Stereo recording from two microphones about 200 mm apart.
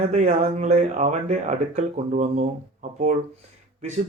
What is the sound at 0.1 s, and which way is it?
Speech, 35° right (ahead or behind).